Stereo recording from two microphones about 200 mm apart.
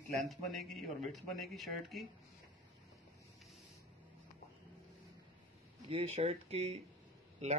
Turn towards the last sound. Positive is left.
turn(degrees=-35)  # may be behind; listen again after turning